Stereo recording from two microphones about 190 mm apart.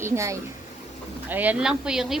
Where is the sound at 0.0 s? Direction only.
15° right (ahead or behind).